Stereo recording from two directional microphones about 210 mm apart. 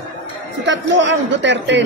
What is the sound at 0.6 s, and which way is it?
Speech, 60° right (ahead or behind).